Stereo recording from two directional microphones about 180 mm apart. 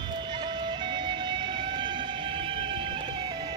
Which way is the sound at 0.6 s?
25° right (ahead or behind).